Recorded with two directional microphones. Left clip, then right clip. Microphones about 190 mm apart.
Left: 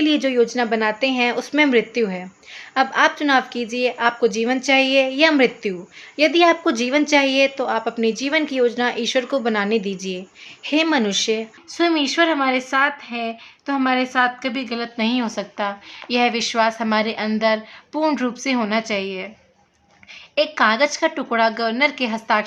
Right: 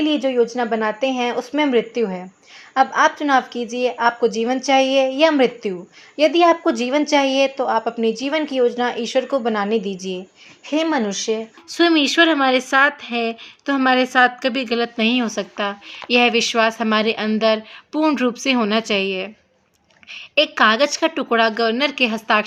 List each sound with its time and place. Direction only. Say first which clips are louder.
0.0 s a woman's voice: even; centre (ahead or behind)
11.7 s speech: right 3 dB; 30° right (ahead or behind)